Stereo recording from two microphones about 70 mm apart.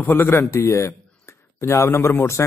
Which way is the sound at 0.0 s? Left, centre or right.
Left.